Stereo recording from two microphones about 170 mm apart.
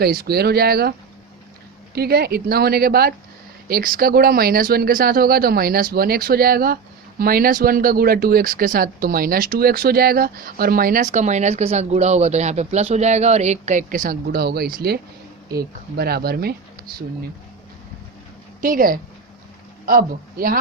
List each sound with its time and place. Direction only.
0.0 s speech: 65° right (ahead or behind)
2.0 s speech: 65° right (ahead or behind)
18.6 s speech: 55° right (ahead or behind)